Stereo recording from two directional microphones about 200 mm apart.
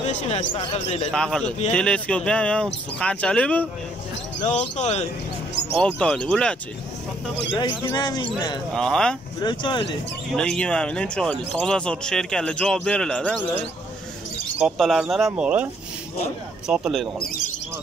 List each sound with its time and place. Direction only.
0.0 s speech: 35° left (ahead or behind)
1.1 s speech: 5° left (ahead or behind)
4.4 s speech: 35° left (ahead or behind)
5.8 s speech: 5° left (ahead or behind)
7.5 s speech: 20° left (ahead or behind)
8.7 s speech: 5° left (ahead or behind)
9.4 s speech: 25° left (ahead or behind)
10.3 s speech: 5° left (ahead or behind)
14.6 s speech: centre (ahead or behind)
17.2 s speech: 45° left (ahead or behind)